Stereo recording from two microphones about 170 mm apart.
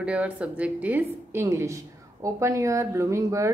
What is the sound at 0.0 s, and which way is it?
A woman's voice, 5° right (ahead or behind).